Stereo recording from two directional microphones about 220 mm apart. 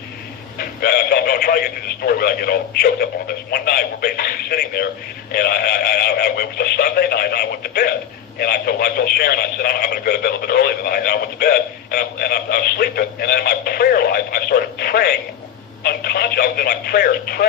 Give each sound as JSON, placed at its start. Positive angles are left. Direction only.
{"t": 0.6, "sound": "speech", "side_deg": 45}